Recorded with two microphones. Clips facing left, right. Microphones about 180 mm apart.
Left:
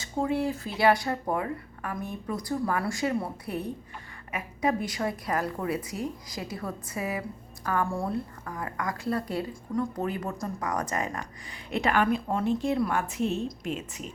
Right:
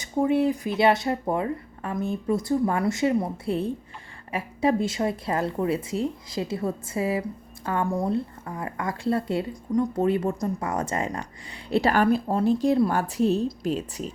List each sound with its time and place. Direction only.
0.0 s a woman's voice: 20° right (ahead or behind); by 14.1 s 35° right (ahead or behind)